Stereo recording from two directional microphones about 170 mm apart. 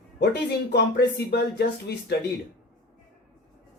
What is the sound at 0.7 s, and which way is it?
Speech, 75° left (ahead or behind).